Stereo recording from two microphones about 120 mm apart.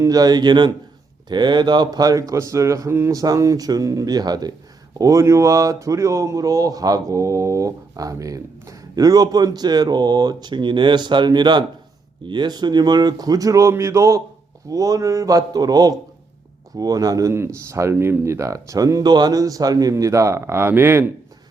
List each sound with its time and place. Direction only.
0.0 s speech: 30° right (ahead or behind)